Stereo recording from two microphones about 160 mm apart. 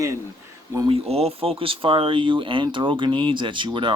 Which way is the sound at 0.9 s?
40° right (ahead or behind).